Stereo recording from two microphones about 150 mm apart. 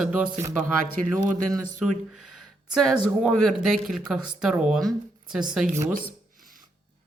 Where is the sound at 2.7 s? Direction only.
5° left (ahead or behind).